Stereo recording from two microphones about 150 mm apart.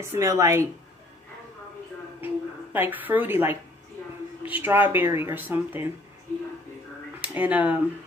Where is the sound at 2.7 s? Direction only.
10° right (ahead or behind).